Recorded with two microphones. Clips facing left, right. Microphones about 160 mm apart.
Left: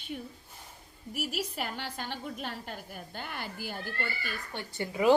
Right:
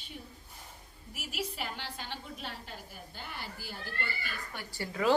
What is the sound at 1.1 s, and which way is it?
A woman's voice, 40° left (ahead or behind).